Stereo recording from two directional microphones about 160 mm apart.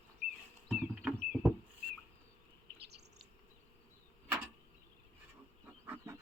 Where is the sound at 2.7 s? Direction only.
90° right.